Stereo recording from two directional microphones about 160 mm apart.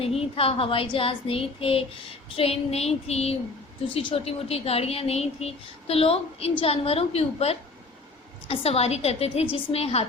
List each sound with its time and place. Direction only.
0.0 s a woman's voice: 35° left (ahead or behind)